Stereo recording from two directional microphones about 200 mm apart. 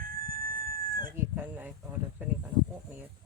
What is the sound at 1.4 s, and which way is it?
Speech, 10° right (ahead or behind).